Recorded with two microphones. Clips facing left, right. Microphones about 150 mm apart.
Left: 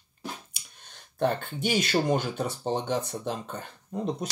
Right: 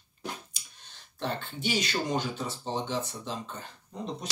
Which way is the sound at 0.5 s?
50° left (ahead or behind).